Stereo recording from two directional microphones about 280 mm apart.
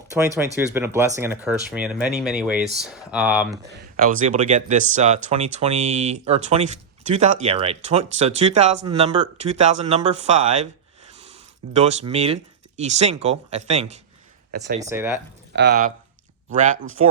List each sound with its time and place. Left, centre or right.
0.1 s speech: centre
3.9 s speech: right
14.5 s speech: right
14.8 s speech: centre
15.5 s speech: right
17.0 s speech: right